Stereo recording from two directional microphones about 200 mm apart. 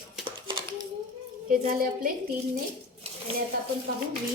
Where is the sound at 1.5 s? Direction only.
45° right (ahead or behind).